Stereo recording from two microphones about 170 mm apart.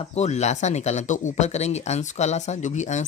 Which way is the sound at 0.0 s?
40° left (ahead or behind).